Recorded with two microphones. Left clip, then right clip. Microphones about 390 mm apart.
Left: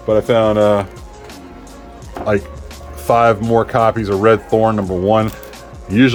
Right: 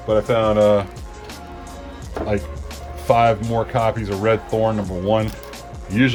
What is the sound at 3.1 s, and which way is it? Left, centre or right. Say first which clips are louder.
Speech: left 4 dB; centre.